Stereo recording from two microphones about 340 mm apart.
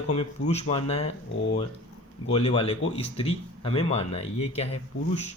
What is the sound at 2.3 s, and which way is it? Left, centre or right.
Speech, centre.